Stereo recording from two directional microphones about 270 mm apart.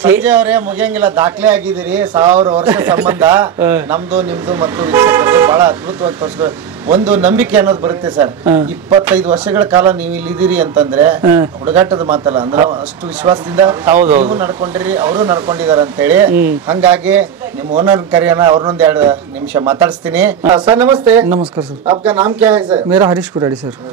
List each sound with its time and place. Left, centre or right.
0.0 s speech: centre
2.2 s speech: centre
2.5 s speech: centre
20.4 s speech: centre